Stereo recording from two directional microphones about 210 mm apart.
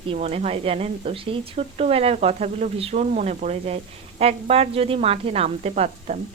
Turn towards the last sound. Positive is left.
turn(degrees=-30)  # may be behind; listen again after turning